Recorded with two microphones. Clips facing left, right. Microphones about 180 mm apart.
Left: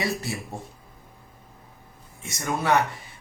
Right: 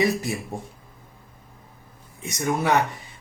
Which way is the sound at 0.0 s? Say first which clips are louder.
Right 6 dB; 20° right (ahead or behind).